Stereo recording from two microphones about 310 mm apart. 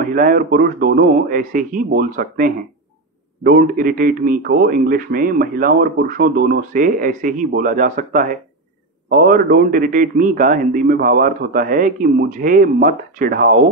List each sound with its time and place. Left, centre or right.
0.0 s speech: right